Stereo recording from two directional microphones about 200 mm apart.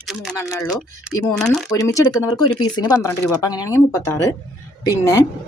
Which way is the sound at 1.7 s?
15° left (ahead or behind).